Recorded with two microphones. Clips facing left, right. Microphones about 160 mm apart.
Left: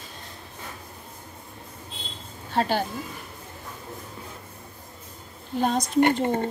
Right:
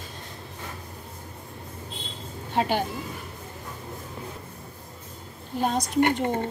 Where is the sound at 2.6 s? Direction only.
15° right (ahead or behind).